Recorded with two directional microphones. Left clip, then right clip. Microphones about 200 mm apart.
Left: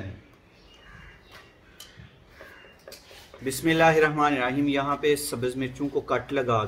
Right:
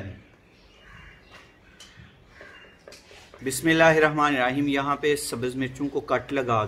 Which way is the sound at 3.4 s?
20° right (ahead or behind).